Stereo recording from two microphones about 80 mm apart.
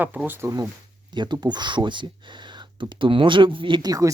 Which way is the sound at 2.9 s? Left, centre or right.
Right.